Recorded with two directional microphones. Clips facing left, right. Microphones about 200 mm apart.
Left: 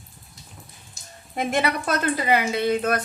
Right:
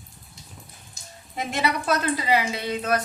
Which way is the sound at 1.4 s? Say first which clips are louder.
Left 3 dB; 55° left (ahead or behind).